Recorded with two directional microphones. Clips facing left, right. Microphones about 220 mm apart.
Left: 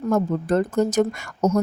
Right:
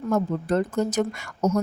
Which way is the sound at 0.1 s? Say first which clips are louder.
Left 3 dB; 45° left (ahead or behind).